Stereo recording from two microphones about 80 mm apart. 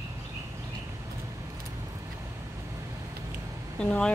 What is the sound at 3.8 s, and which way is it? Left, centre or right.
Speech, centre.